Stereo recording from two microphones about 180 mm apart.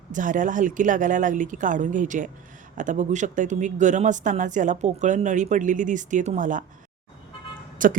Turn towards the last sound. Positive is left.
turn(degrees=-50)  # may be behind; listen again after turning